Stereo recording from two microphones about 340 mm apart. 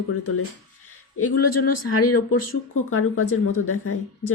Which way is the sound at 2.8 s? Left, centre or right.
Left.